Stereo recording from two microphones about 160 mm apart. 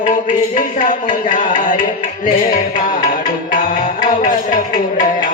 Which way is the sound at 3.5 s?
60° left (ahead or behind).